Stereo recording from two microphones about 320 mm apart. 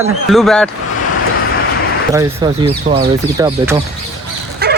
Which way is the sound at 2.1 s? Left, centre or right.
Centre.